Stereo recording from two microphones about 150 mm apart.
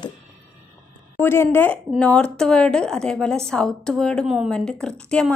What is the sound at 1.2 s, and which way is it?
A woman's voice, 15° left (ahead or behind).